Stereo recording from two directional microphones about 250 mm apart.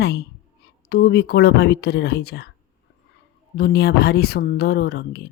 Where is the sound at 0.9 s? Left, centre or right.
Left.